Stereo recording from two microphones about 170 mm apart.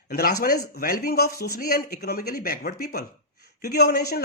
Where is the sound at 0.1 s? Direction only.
65° left (ahead or behind).